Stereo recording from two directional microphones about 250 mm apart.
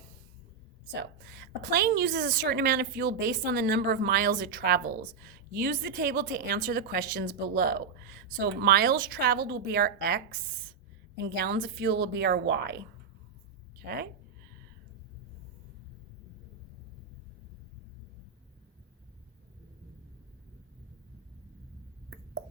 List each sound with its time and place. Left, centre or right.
0.9 s a woman's voice: right
13.7 s speech: right